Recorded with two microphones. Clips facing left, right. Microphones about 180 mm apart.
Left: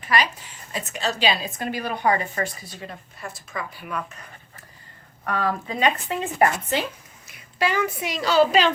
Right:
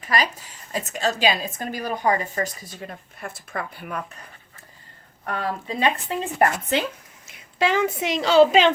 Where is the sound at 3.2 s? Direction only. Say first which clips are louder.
Right 2 dB; 55° right (ahead or behind).